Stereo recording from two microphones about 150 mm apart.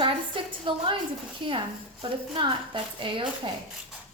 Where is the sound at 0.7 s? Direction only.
35° right (ahead or behind).